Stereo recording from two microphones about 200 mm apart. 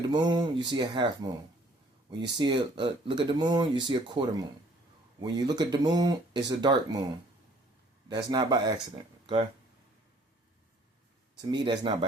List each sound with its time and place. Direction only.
0.1 s speech: 20° right (ahead or behind)
2.4 s speech: 25° right (ahead or behind)
11.3 s speech: 25° right (ahead or behind)